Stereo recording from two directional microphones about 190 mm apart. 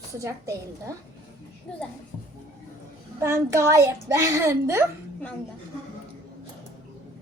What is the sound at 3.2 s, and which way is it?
A child's voice, 15° right (ahead or behind).